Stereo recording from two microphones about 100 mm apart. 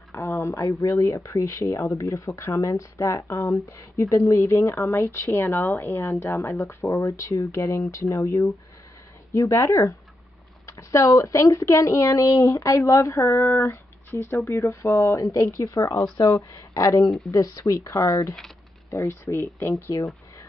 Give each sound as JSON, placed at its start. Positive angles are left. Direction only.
{"t": 0.1, "sound": "speech", "side_deg": 25}